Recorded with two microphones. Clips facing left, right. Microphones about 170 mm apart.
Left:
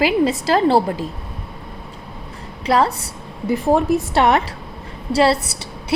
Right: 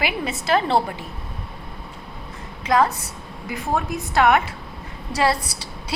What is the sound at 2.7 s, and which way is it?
A woman's voice, 30° left (ahead or behind).